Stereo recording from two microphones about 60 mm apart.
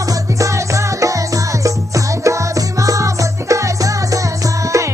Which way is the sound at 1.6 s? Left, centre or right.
Right.